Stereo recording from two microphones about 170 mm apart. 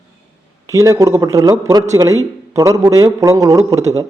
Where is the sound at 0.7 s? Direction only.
20° right (ahead or behind).